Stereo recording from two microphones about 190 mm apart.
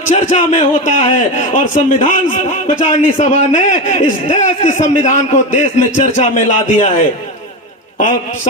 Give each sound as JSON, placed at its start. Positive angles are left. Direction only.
{"t": 0.0, "sound": "a man's voice", "side_deg": 40}